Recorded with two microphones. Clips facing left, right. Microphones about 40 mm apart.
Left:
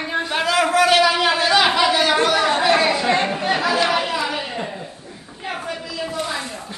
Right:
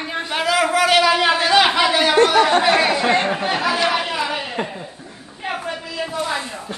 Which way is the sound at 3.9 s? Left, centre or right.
Centre.